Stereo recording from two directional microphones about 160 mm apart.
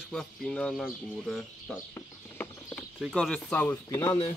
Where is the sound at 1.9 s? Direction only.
10° left (ahead or behind).